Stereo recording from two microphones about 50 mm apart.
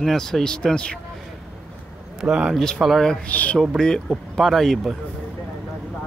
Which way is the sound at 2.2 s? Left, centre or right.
Centre.